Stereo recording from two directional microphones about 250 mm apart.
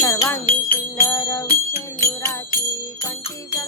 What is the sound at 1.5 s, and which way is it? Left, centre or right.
Music, left.